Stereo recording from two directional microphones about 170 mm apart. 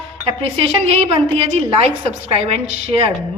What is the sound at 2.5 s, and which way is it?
Speech, 35° right (ahead or behind).